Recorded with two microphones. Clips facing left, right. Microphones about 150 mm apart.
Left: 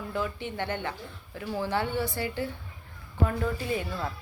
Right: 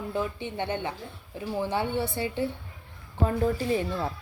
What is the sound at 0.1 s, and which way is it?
Speech, 20° right (ahead or behind).